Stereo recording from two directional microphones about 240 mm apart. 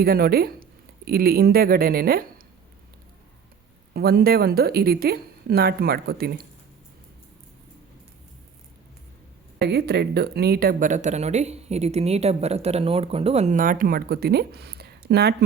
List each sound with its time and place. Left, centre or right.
0.0 s speech: right
3.9 s speech: right
9.6 s speech: right